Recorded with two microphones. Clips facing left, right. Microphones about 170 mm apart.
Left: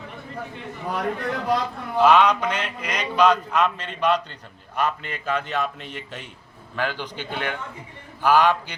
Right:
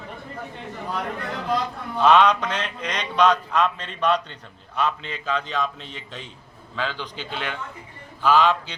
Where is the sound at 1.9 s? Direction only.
5° left (ahead or behind).